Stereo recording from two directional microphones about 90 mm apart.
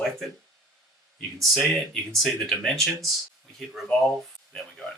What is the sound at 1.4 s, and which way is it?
Speech, centre (ahead or behind).